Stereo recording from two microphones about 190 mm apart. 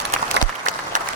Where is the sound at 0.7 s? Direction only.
40° right (ahead or behind).